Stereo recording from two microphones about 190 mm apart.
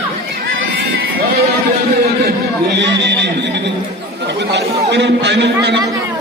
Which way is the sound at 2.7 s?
65° right (ahead or behind).